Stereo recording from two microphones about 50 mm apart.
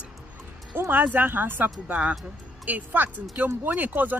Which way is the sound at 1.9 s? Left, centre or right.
Right.